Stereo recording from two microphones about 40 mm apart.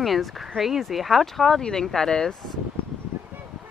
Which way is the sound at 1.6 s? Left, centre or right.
Centre.